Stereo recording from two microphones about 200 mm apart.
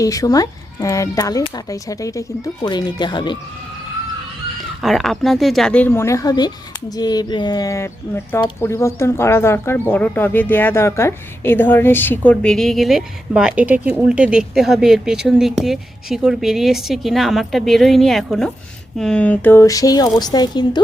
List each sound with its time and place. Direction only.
0.0 s speech: 15° left (ahead or behind)
4.8 s speech: centre (ahead or behind); by 20.8 s 20° left (ahead or behind)